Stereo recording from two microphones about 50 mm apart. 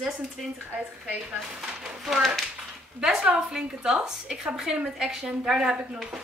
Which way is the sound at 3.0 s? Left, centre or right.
Centre.